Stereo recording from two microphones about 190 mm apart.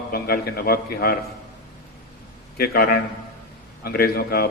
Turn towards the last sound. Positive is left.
turn(degrees=55)  # may be behind; listen again after turning